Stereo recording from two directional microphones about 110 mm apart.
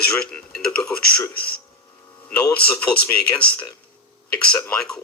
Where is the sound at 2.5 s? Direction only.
10° left (ahead or behind).